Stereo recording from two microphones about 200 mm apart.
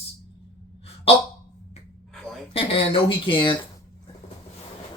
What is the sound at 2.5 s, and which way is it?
Speech, 25° left (ahead or behind).